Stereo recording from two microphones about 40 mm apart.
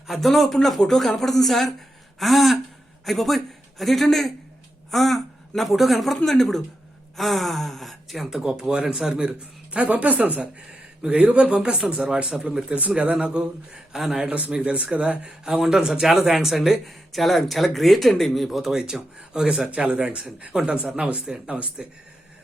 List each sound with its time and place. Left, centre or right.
0.1 s a woman's voice: centre
8.3 s speech: centre
9.7 s speech: right
13.9 s speech: centre
14.3 s speech: right
15.4 s speech: centre; by 21.8 s right